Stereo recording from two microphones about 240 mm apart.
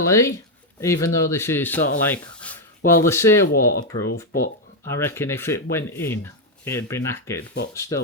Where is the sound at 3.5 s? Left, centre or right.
Left.